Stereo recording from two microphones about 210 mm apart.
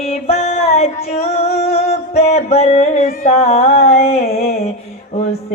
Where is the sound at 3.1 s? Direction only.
30° left (ahead or behind).